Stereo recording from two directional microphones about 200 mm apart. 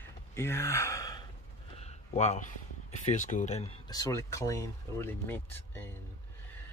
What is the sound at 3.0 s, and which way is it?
Speech, 40° left (ahead or behind).